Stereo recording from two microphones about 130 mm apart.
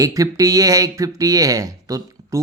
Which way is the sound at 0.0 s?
25° right (ahead or behind).